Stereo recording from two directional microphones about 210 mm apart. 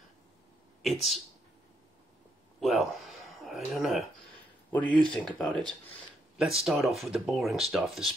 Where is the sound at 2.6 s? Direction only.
Centre (ahead or behind).